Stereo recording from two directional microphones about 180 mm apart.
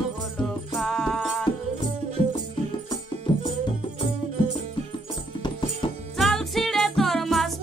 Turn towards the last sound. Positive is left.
turn(degrees=0)  # may be behind; listen again after turning